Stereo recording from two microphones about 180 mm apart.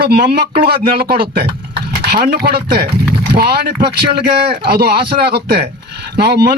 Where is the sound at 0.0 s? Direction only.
60° right (ahead or behind).